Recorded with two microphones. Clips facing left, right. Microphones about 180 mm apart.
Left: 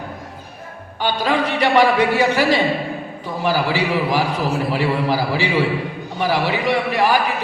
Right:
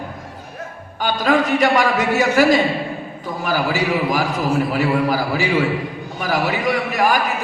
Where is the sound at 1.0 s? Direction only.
45° right (ahead or behind).